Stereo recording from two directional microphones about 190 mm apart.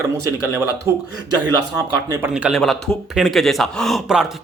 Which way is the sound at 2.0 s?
15° right (ahead or behind).